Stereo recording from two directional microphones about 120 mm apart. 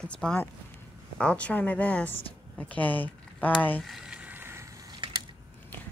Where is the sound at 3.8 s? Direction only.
Centre (ahead or behind); by 5.0 s 25° right (ahead or behind).